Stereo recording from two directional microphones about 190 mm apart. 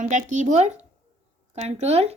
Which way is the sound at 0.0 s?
40° right (ahead or behind).